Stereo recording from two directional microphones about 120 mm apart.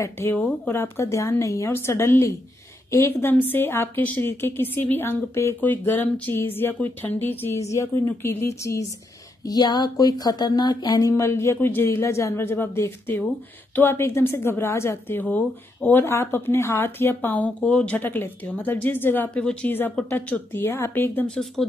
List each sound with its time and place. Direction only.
0.0 s a woman's voice: 20° left (ahead or behind)